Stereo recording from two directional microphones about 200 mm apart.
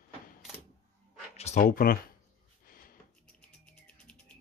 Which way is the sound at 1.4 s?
35° left (ahead or behind).